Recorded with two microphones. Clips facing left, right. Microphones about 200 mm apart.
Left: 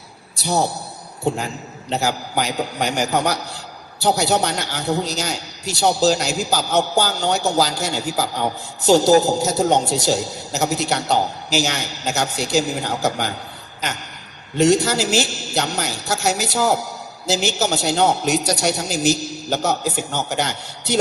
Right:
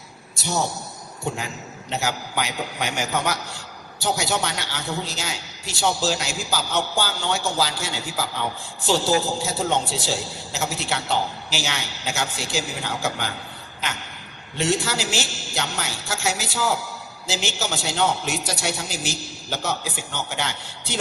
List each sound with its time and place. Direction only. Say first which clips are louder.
0.4 s a man's voice: left 5 dB; 35° left (ahead or behind)
1.9 s a man's voice: left 5 dB; 35° left (ahead or behind)
14.6 s a man's voice: left 8 dB; 40° left (ahead or behind)